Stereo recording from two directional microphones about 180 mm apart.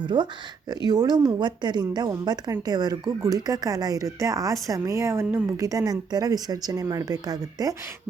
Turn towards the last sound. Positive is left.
turn(degrees=-20)  # may be behind; listen again after turning